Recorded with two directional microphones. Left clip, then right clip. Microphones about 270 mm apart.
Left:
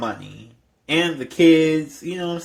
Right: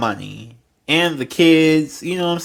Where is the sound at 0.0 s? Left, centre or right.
Right.